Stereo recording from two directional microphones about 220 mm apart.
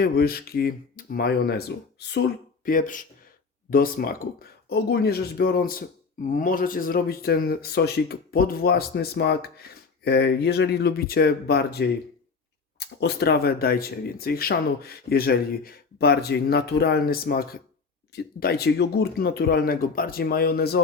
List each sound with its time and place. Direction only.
0.0 s speech: 45° left (ahead or behind)
13.0 s speech: 50° left (ahead or behind)